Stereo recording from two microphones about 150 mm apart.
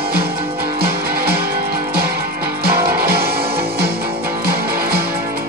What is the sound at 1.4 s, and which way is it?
Music, 85° right.